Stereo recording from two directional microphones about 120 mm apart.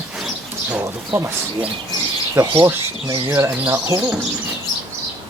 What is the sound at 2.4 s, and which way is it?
Speech, 35° right (ahead or behind).